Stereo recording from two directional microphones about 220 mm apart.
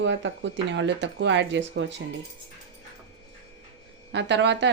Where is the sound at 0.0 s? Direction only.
55° right (ahead or behind).